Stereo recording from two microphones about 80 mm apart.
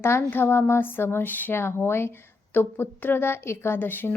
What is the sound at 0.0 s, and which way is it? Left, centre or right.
Speech, left.